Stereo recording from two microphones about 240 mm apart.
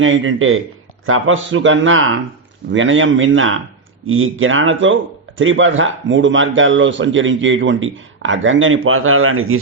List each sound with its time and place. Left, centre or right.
0.0 s a man's voice: right